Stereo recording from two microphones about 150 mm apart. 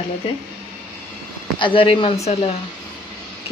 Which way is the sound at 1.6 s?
35° left (ahead or behind).